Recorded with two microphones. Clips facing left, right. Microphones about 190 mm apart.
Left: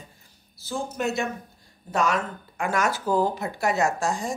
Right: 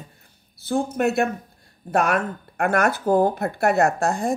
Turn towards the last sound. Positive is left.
turn(degrees=-60)  # may be behind; listen again after turning